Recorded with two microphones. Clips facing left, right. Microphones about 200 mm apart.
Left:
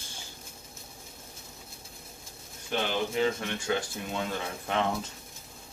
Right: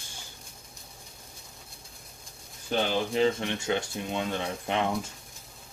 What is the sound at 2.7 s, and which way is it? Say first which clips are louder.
Speech: right 3 dB; 30° right (ahead or behind).